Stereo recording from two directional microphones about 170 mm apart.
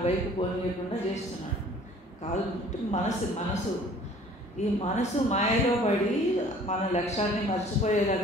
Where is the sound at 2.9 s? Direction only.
45° left (ahead or behind).